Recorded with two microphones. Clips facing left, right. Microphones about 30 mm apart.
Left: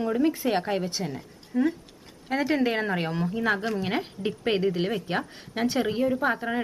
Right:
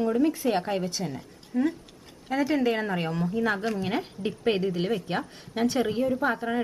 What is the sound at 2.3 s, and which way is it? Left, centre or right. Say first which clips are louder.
A woman's voice: even; centre.